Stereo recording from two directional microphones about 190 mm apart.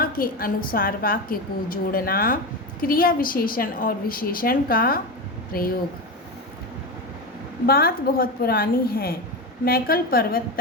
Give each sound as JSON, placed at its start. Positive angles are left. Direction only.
{"t": 0.0, "sound": "a woman's voice", "side_deg": 50}
{"t": 7.7, "sound": "a woman's voice", "side_deg": 50}